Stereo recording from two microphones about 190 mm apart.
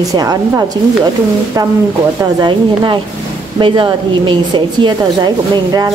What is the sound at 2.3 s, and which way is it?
A woman's voice, 25° right (ahead or behind).